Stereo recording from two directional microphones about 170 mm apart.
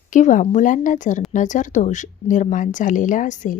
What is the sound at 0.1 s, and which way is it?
Speech, 50° left (ahead or behind).